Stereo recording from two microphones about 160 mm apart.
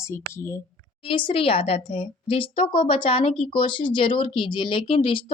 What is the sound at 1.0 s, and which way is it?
A woman's voice, 30° left (ahead or behind).